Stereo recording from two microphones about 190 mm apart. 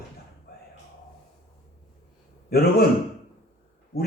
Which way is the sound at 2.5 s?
55° left (ahead or behind).